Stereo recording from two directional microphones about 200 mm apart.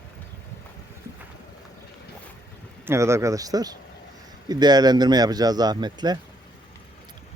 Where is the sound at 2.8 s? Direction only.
15° right (ahead or behind).